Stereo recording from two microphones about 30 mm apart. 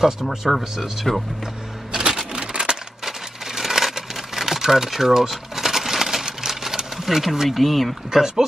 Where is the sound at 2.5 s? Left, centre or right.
Right.